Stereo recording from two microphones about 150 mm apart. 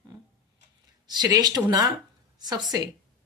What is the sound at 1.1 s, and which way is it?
Speech, 25° right (ahead or behind).